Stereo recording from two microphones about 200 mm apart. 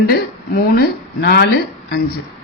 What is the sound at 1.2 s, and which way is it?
Speech, 55° left (ahead or behind).